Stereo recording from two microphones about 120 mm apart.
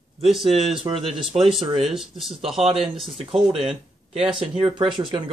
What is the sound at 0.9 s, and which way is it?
Speech, 30° right (ahead or behind).